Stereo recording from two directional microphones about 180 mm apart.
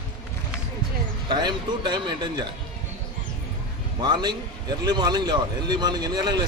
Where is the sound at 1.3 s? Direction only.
25° right (ahead or behind).